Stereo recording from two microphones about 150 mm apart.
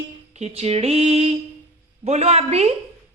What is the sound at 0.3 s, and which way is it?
Speech, 45° right (ahead or behind).